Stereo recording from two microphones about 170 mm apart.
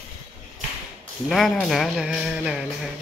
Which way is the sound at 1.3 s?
Centre (ahead or behind).